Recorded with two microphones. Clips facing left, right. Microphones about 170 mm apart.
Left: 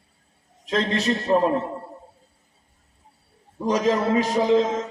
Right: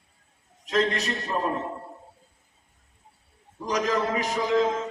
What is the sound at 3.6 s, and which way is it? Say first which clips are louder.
Speech: left 5 dB; 30° left (ahead or behind).